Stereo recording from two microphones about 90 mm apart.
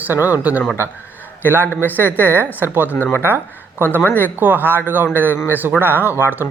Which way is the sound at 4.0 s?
20° left (ahead or behind).